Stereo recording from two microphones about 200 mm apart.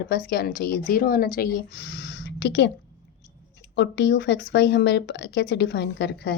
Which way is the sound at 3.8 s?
60° left (ahead or behind).